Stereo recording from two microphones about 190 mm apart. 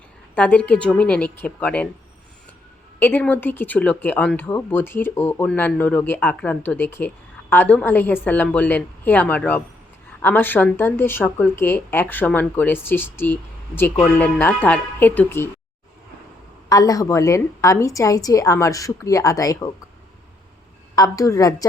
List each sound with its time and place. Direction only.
0.3 s speech: 5° left (ahead or behind)
3.0 s speech: 10° left (ahead or behind)
16.6 s speech: 20° left (ahead or behind)
20.9 s a woman's voice: 20° left (ahead or behind)